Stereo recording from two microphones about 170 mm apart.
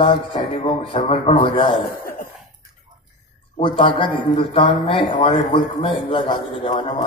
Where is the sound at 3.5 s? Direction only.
30° left (ahead or behind).